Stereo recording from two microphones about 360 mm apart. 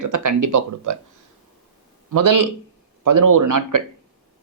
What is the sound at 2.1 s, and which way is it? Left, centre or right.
Speech, right.